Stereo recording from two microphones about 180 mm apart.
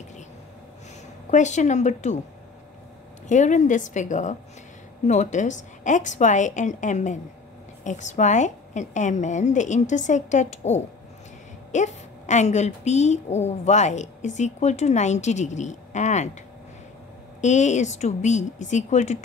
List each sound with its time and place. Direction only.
1.3 s a woman's voice: 40° left (ahead or behind)
3.3 s a woman's voice: 40° left (ahead or behind)
17.4 s a woman's voice: 40° left (ahead or behind)